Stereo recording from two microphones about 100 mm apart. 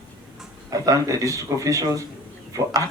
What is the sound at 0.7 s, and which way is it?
A man's voice, 35° right (ahead or behind).